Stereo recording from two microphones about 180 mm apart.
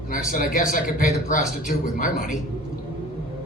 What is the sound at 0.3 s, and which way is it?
A man's voice, 50° left (ahead or behind).